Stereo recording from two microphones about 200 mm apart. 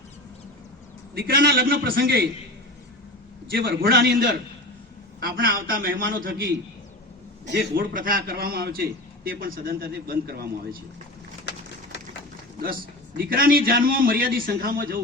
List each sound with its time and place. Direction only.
1.1 s a man's voice: 50° right (ahead or behind)
3.5 s a man's voice: 50° right (ahead or behind)
7.5 s a man's voice: 45° right (ahead or behind)
12.6 s a man's voice: 45° right (ahead or behind)